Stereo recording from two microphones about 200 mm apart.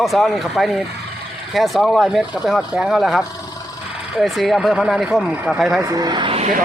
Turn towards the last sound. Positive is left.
turn(degrees=-30)  # may be behind; listen again after turning